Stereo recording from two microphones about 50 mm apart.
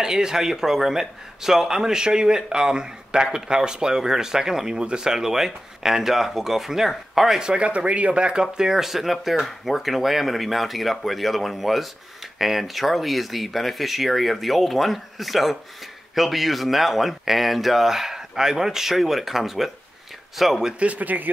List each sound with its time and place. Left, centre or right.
0.0 s a man's voice: centre
20.8 s speech: right